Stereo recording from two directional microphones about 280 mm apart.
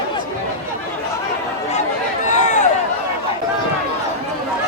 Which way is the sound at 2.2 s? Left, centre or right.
Left.